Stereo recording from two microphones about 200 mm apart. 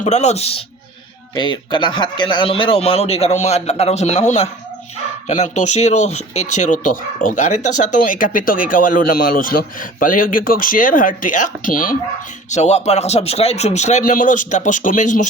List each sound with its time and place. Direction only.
0.0 s a man's voice: 35° left (ahead or behind)